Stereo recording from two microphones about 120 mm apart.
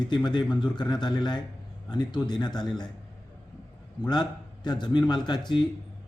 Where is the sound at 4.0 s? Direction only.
35° left (ahead or behind).